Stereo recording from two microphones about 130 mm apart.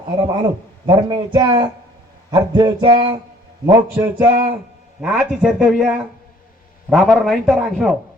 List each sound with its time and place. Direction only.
0.3 s speech: 35° right (ahead or behind)
3.9 s speech: 15° right (ahead or behind)
4.9 s speech: 5° right (ahead or behind)